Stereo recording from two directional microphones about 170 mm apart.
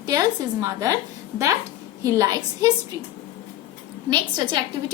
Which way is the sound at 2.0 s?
20° right (ahead or behind).